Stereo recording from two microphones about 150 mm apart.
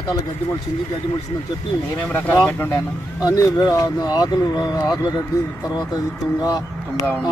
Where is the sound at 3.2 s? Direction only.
25° left (ahead or behind).